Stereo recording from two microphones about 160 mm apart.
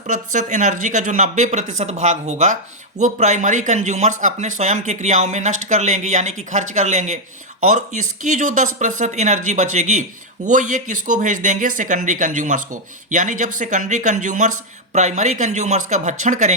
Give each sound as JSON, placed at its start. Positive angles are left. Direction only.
{"t": 0.1, "sound": "speech", "side_deg": -50}